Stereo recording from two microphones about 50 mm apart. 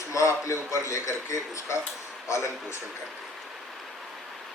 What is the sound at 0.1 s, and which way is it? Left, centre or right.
Speech, left.